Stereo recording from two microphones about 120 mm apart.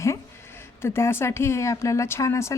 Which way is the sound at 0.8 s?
20° left (ahead or behind).